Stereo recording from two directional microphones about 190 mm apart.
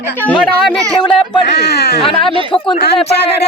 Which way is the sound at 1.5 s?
60° left (ahead or behind).